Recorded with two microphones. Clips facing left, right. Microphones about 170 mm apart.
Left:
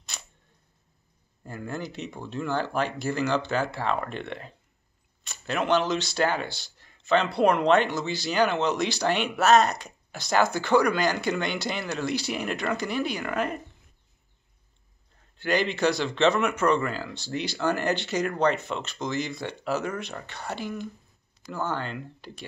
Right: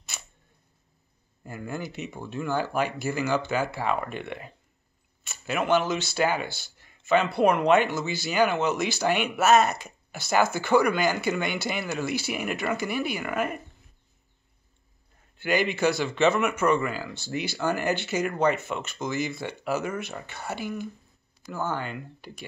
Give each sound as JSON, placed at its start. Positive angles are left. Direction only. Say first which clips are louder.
{"t": 0.1, "sound": "a sound", "louder": "even", "side_deg": -5}
{"t": 1.4, "sound": "speech", "louder": "even", "side_deg": -5}
{"t": 15.3, "sound": "speech", "louder": "even", "side_deg": -5}